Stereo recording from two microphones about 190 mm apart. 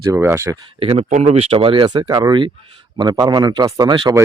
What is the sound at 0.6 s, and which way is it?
Speech, 30° right (ahead or behind).